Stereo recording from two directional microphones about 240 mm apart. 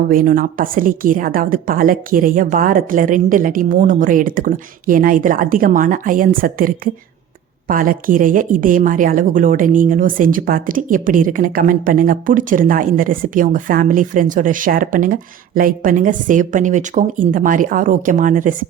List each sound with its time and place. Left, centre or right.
0.1 s speech: right